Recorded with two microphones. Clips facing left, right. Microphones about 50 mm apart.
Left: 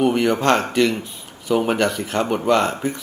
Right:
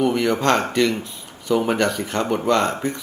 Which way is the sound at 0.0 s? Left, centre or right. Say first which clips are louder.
Left 2 dB; left.